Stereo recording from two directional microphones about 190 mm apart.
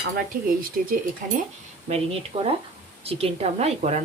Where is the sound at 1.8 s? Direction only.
30° right (ahead or behind).